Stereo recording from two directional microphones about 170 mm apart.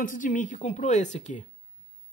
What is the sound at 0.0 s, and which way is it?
Speech, 50° left (ahead or behind).